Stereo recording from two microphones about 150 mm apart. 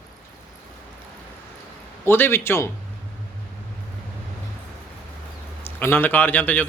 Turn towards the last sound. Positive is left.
turn(degrees=10)  # may be behind; listen again after turning